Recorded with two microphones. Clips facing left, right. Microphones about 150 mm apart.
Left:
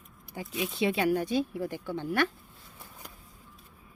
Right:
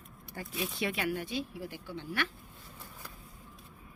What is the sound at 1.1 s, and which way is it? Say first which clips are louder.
A woman's voice: left 8 dB; 45° left (ahead or behind).